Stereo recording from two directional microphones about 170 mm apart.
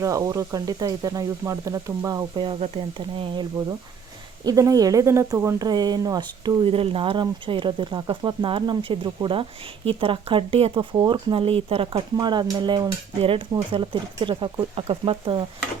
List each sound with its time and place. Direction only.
0.0 s speech: 20° right (ahead or behind)
2.3 s speech: 30° right (ahead or behind)